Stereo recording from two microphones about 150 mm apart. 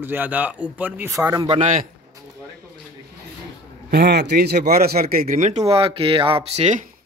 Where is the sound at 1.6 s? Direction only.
55° right (ahead or behind).